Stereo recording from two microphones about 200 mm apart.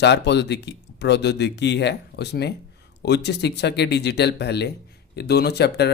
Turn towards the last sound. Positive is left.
turn(degrees=55)  # may be behind; listen again after turning